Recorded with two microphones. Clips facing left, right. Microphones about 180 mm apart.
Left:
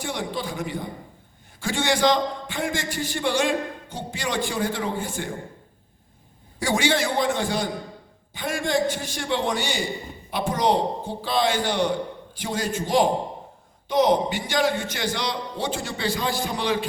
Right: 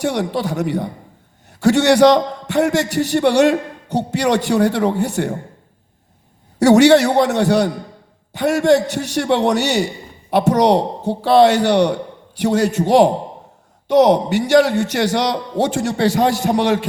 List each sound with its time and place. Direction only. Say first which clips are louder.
0.0 s a man's voice: right 9 dB; 70° right (ahead or behind)
6.6 s a man's voice: right 13 dB; 75° right (ahead or behind)